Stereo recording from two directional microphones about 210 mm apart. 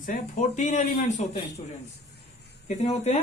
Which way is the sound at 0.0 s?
40° left (ahead or behind).